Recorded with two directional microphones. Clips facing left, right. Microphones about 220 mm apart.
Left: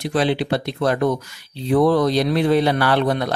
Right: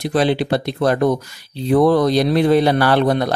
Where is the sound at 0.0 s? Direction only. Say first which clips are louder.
Right 3 dB; 40° right (ahead or behind).